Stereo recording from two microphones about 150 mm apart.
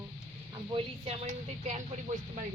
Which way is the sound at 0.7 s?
40° right (ahead or behind).